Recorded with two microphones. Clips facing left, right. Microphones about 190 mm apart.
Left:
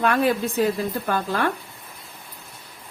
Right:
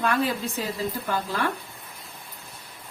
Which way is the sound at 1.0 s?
55° left (ahead or behind).